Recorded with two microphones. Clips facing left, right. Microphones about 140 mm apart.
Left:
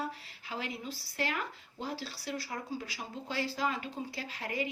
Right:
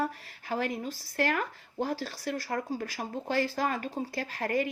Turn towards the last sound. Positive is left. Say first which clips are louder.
# right 7 dB
turn(degrees=-50)  # may be behind; listen again after turning